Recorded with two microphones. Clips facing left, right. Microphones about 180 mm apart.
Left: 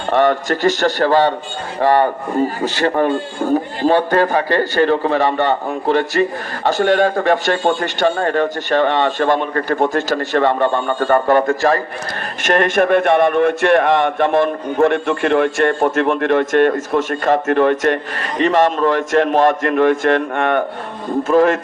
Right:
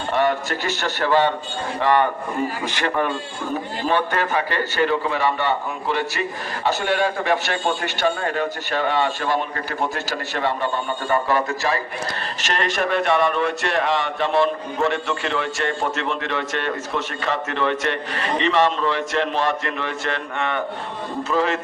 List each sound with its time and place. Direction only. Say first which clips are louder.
0.1 s a man's voice: left 6 dB; 50° left (ahead or behind)